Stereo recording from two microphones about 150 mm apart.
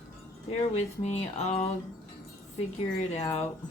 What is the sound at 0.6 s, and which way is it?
Speech, 50° left (ahead or behind).